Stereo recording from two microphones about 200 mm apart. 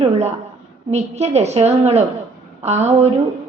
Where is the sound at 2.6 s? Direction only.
35° right (ahead or behind).